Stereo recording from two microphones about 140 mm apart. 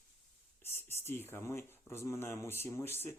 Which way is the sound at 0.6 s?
15° left (ahead or behind).